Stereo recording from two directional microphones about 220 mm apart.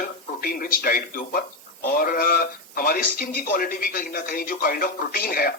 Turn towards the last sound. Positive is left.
turn(degrees=45)  # may be behind; listen again after turning